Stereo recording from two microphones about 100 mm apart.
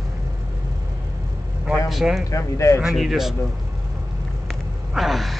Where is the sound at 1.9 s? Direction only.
5° right (ahead or behind).